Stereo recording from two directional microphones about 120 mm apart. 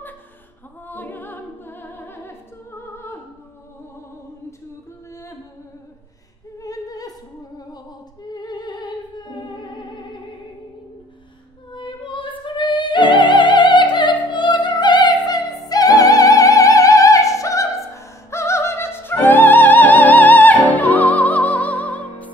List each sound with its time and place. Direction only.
0.8 s music: 15° left (ahead or behind)
6.6 s opera: 30° left (ahead or behind)
8.3 s music: 35° left (ahead or behind)
11.7 s music: 40° left (ahead or behind)
12.4 s opera: 40° left (ahead or behind); by 22.3 s 15° left (ahead or behind)